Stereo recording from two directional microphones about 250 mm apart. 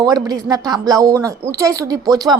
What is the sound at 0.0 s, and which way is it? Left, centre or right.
A woman's voice, centre.